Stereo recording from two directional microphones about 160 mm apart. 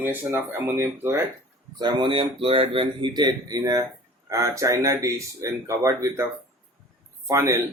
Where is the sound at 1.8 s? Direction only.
30° right (ahead or behind).